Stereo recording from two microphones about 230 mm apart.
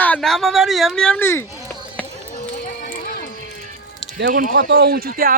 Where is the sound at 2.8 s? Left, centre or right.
Left.